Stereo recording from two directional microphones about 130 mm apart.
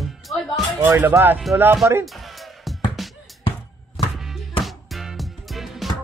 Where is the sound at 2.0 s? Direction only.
Centre (ahead or behind).